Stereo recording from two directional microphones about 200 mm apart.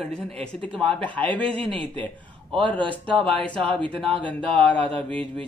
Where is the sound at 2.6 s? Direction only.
25° right (ahead or behind).